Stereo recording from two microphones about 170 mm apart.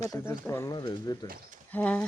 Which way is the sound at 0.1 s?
15° left (ahead or behind).